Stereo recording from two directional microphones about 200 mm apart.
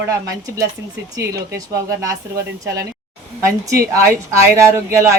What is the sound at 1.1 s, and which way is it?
Speech, 15° right (ahead or behind).